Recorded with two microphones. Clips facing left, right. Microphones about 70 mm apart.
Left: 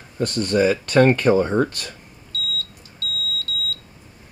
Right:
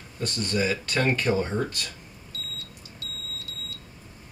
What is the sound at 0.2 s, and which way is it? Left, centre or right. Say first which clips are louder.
Speech: left 8 dB; left.